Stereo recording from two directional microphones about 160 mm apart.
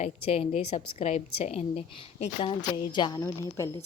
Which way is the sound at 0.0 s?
40° left (ahead or behind).